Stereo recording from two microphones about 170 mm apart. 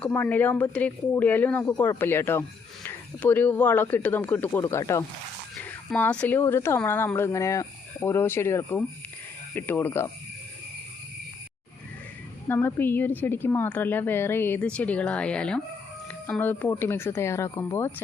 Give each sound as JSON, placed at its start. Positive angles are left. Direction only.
{"t": 0.0, "sound": "speech", "side_deg": 10}
{"t": 12.5, "sound": "speech", "side_deg": 10}